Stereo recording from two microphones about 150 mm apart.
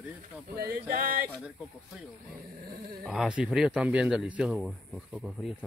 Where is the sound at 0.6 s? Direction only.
80° right.